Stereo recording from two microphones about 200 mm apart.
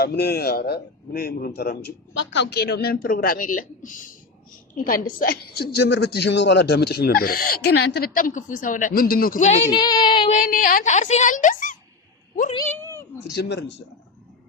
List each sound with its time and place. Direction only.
0.0 s a woman's voice: 55° left (ahead or behind); by 9.7 s 30° left (ahead or behind)
9.7 s speech: 20° left (ahead or behind)
10.3 s a woman's voice: 40° left (ahead or behind)
12.5 s speech: 10° left (ahead or behind)
13.3 s speech: 55° left (ahead or behind)